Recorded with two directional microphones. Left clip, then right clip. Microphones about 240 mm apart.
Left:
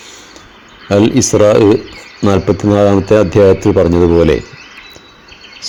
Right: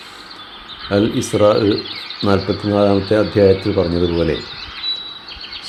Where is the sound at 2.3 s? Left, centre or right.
Left.